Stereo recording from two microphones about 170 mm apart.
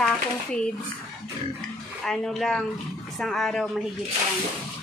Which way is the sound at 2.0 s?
5° left (ahead or behind).